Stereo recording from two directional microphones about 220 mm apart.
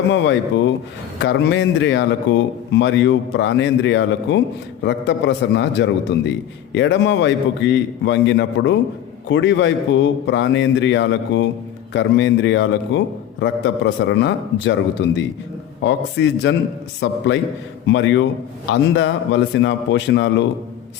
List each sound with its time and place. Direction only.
0.1 s speech: 55° left (ahead or behind)